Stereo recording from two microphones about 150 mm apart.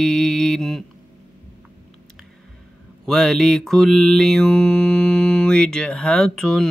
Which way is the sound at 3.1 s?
Centre (ahead or behind).